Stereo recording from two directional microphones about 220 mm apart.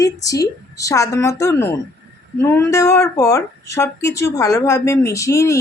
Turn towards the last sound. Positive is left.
turn(degrees=15)  # may be behind; listen again after turning